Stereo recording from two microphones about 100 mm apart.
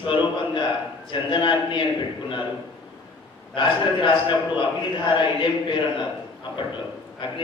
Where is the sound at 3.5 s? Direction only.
55° left (ahead or behind).